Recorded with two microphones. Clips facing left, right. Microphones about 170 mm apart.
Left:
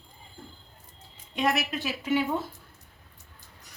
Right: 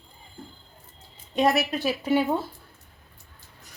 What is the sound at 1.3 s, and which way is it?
A woman's voice, 35° right (ahead or behind).